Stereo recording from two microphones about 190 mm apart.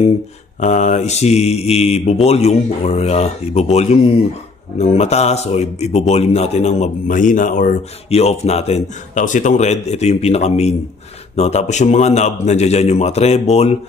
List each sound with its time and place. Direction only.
0.6 s speech: 40° left (ahead or behind)
8.1 s speech: 35° left (ahead or behind)